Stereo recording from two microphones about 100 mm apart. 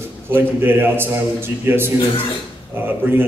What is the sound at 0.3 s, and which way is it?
Speech, 20° right (ahead or behind).